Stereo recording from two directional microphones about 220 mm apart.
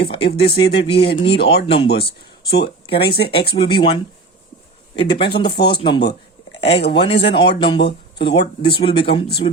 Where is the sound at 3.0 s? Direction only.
45° left (ahead or behind).